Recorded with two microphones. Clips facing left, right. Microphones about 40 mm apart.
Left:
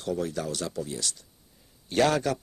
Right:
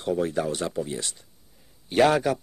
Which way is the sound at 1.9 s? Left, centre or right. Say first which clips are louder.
Right 4 dB; centre.